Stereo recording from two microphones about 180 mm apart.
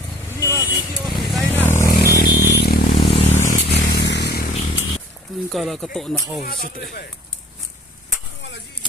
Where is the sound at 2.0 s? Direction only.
60° left (ahead or behind).